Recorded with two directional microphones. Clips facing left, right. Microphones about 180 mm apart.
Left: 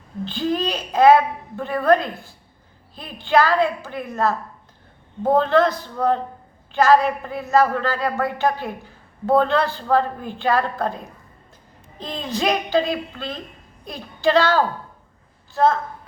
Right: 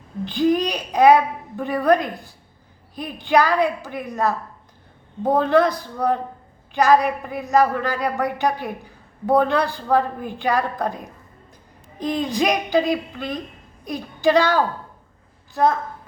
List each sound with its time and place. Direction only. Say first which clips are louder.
0.3 s a woman's voice: right 4 dB; 15° right (ahead or behind)